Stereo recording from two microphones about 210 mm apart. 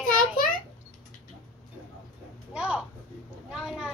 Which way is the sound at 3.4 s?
Centre (ahead or behind).